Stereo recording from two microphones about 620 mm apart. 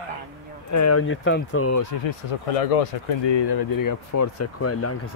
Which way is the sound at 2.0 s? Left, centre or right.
Left.